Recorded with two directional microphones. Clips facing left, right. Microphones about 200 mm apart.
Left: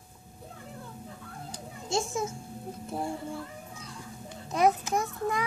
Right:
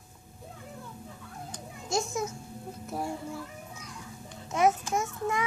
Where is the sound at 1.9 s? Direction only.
30° left (ahead or behind).